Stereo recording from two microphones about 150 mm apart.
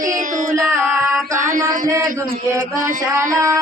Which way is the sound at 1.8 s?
20° right (ahead or behind).